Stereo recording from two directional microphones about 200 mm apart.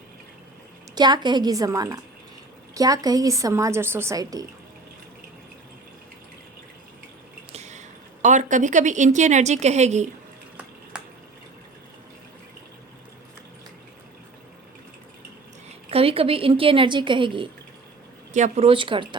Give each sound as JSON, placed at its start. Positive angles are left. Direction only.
{"t": 0.9, "sound": "a woman's voice", "side_deg": -20}
{"t": 7.5, "sound": "speech", "side_deg": -35}
{"t": 10.9, "sound": "drip", "side_deg": -5}
{"t": 15.9, "sound": "speech", "side_deg": -30}